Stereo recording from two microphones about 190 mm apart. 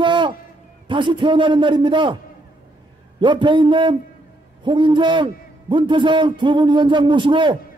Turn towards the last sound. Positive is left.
turn(degrees=-25)  # may be behind; listen again after turning